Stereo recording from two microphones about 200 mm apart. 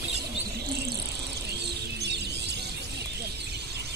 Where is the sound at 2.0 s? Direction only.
55° right (ahead or behind).